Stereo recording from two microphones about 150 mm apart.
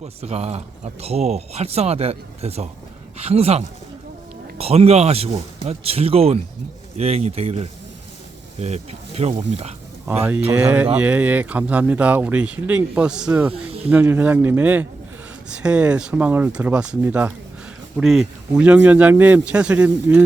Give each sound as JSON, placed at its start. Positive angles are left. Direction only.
{"t": 0.0, "sound": "speech", "side_deg": -45}
{"t": 10.5, "sound": "speech", "side_deg": -10}
{"t": 13.5, "sound": "speech", "side_deg": -40}
{"t": 13.9, "sound": "speech", "side_deg": -10}
{"t": 17.9, "sound": "speech", "side_deg": 0}